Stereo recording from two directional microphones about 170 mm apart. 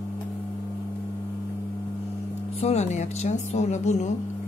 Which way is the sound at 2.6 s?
40° left (ahead or behind).